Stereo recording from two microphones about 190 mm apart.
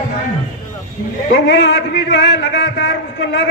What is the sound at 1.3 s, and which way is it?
A man's voice, 70° left (ahead or behind).